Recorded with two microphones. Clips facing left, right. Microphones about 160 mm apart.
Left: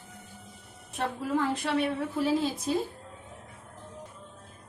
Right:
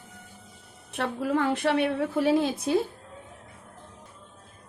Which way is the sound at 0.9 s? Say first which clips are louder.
Right 3 dB; 75° right (ahead or behind).